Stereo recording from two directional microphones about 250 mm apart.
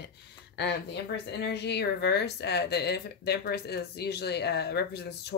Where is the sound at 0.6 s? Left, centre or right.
Left.